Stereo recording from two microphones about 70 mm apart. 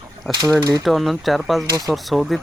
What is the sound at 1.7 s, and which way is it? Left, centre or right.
Speech, right.